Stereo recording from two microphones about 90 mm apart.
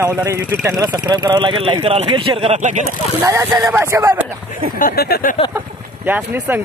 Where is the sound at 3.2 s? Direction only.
30° right (ahead or behind).